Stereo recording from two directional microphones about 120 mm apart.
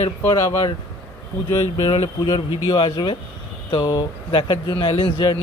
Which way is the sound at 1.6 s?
55° left (ahead or behind).